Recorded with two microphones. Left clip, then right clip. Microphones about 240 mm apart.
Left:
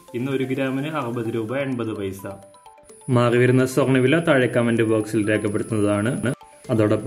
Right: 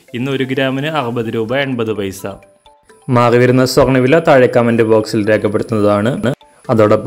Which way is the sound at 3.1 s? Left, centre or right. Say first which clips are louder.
Right 8 dB; right.